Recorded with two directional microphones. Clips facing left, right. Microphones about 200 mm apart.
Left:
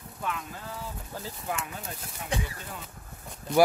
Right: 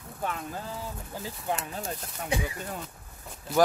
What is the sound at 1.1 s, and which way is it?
Speech, 15° right (ahead or behind).